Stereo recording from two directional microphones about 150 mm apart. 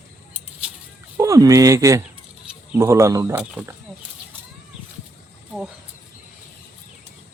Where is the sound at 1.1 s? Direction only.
20° right (ahead or behind).